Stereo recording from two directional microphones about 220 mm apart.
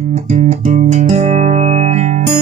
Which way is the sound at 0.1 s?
30° right (ahead or behind).